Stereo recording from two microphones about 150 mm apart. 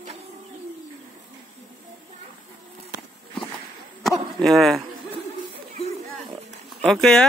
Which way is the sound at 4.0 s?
Centre (ahead or behind).